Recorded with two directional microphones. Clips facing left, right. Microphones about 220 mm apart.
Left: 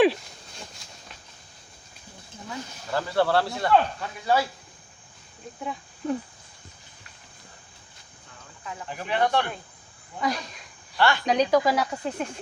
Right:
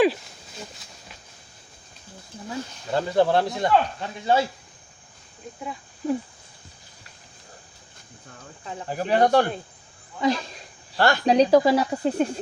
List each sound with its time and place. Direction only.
2.5 s speech: 20° right (ahead or behind)
5.5 s speech: centre (ahead or behind)
8.6 s speech: 30° right (ahead or behind)
10.2 s speech: 25° right (ahead or behind)
10.9 s speech: 40° right (ahead or behind)